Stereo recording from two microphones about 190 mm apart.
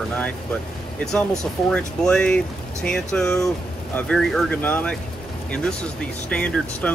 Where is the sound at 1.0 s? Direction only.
5° left (ahead or behind).